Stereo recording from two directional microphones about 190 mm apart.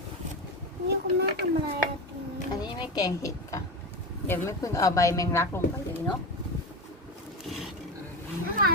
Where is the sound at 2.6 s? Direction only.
20° left (ahead or behind).